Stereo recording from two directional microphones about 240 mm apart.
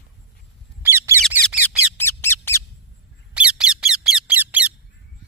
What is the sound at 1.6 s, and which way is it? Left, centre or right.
Bird, centre.